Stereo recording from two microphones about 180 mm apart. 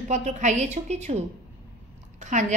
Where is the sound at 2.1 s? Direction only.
40° right (ahead or behind).